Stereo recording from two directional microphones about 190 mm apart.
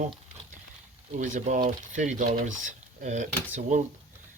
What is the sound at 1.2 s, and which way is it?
Speech, 40° right (ahead or behind).